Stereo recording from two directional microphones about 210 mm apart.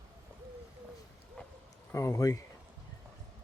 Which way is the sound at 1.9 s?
15° left (ahead or behind).